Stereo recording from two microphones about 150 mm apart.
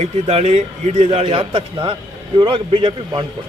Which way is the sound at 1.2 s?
40° right (ahead or behind).